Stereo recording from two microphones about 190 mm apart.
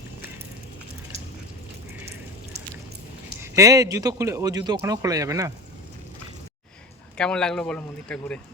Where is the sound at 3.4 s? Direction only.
15° right (ahead or behind).